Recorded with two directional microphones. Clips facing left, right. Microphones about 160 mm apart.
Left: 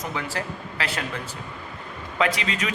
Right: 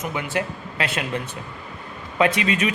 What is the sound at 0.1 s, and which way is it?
Speech, 20° right (ahead or behind).